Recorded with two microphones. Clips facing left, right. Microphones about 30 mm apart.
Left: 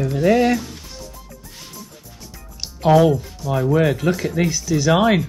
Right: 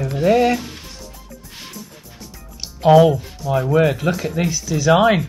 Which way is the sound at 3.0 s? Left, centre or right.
Right.